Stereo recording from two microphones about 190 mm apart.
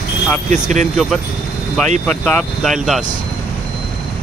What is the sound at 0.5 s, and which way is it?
Speech, 40° right (ahead or behind).